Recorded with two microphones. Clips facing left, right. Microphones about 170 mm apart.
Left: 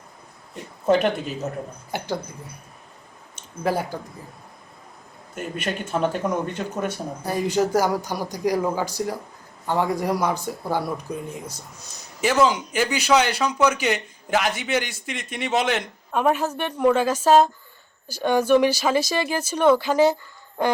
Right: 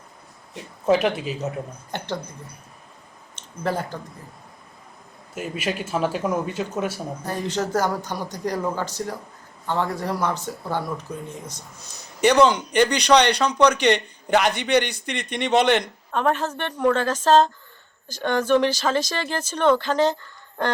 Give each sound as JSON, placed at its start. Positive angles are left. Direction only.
{"t": 0.9, "sound": "a man's voice", "side_deg": 0}
{"t": 1.9, "sound": "speech", "side_deg": 10}
{"t": 3.3, "sound": "speech", "side_deg": 10}
{"t": 5.3, "sound": "a man's voice", "side_deg": -5}
{"t": 7.2, "sound": "a man's voice", "side_deg": 10}